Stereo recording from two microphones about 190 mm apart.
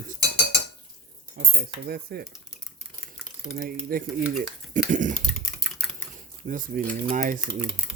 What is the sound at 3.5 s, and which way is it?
Speech, 50° right (ahead or behind).